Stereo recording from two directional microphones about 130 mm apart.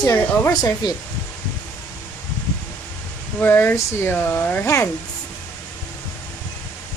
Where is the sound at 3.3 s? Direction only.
15° left (ahead or behind).